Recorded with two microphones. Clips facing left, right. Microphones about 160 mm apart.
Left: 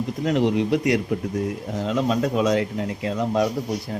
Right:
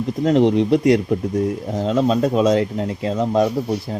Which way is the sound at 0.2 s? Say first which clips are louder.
Right 6 dB; 30° right (ahead or behind).